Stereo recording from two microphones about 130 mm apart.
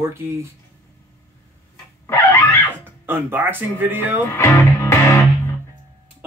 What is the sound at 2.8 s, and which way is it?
Speech, 15° right (ahead or behind).